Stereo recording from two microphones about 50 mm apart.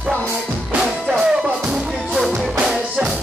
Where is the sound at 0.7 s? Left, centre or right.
Centre.